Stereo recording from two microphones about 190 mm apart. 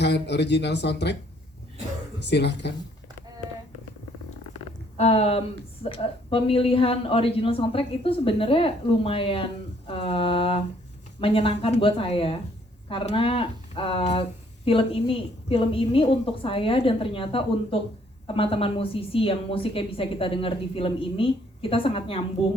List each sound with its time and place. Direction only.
0.0 s speech: 65° left (ahead or behind)
2.1 s speech: 65° left (ahead or behind)
4.5 s a sound: 35° left (ahead or behind)
5.8 s speech: 30° left (ahead or behind)